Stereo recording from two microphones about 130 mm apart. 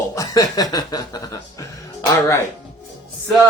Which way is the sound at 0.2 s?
30° left (ahead or behind).